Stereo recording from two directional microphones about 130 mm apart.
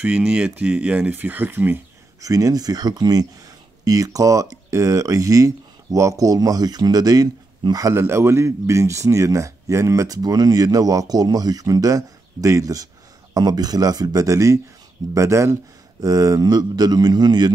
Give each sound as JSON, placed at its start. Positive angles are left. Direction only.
{"t": 0.0, "sound": "speech", "side_deg": -10}
{"t": 2.2, "sound": "speech", "side_deg": -25}